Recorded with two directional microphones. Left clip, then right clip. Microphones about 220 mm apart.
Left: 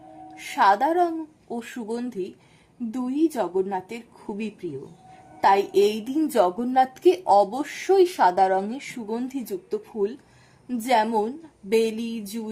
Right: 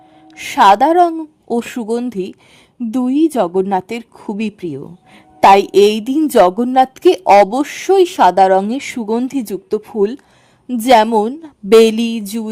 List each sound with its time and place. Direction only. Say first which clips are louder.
0.3 s a woman's voice: right 10 dB; 45° right (ahead or behind)